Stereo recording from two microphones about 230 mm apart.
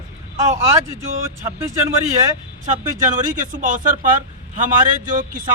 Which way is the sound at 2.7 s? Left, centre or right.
Right.